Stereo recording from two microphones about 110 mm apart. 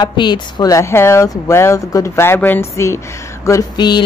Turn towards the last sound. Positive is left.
turn(degrees=40)  # may be behind; listen again after turning